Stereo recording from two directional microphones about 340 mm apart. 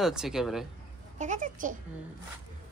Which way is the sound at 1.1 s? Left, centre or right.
Right.